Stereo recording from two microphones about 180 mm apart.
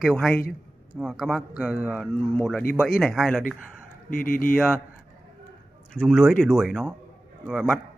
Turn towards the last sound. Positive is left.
turn(degrees=0)  # may be behind; listen again after turning